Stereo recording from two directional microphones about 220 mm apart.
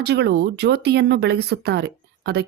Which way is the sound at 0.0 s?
50° right (ahead or behind).